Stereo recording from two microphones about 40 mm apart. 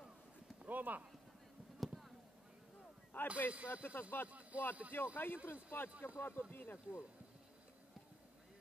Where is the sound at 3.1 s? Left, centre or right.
Left.